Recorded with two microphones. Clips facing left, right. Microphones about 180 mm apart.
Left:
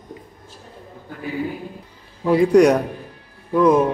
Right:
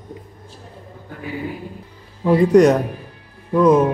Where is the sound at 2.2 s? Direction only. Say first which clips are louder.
Right 1 dB; centre (ahead or behind).